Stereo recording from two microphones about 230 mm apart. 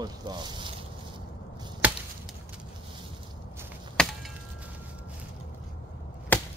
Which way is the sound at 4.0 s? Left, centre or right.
Centre.